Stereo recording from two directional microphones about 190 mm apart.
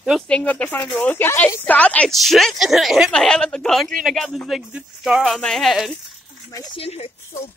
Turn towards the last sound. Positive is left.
turn(degrees=30)  # may be behind; listen again after turning